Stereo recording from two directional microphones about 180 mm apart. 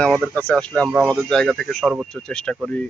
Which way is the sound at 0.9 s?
5° right (ahead or behind).